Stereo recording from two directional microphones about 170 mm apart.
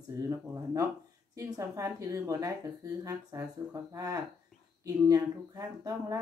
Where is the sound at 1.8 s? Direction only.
20° right (ahead or behind).